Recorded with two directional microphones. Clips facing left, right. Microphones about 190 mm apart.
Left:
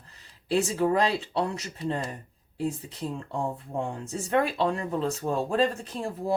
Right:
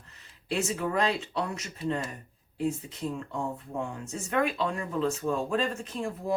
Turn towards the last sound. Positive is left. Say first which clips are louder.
# left 3 dB
turn(degrees=35)  # may be behind; listen again after turning